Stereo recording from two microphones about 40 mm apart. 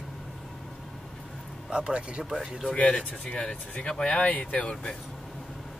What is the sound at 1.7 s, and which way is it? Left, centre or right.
Speech, right.